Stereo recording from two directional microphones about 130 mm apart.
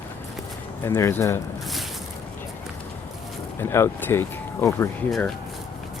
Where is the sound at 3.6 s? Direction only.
20° left (ahead or behind).